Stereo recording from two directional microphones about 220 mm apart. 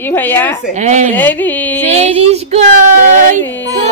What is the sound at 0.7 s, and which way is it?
Child singing, 30° right (ahead or behind).